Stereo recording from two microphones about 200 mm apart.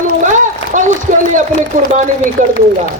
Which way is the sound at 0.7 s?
40° right (ahead or behind).